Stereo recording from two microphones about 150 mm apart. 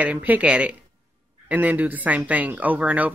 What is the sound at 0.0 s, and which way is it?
Speech, 10° right (ahead or behind).